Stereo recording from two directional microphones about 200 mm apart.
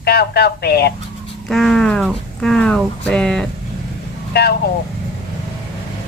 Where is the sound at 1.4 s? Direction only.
Centre (ahead or behind).